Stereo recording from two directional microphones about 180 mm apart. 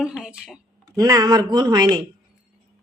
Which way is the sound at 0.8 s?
20° right (ahead or behind).